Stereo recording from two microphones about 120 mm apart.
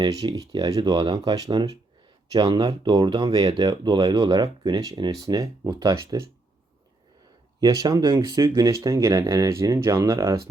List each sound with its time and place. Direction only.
0.1 s speech: 30° right (ahead or behind)
7.6 s speech: 30° right (ahead or behind)